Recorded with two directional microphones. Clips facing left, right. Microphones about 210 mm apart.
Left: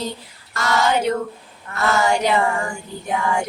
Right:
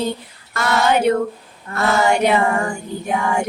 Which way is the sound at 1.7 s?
30° right (ahead or behind).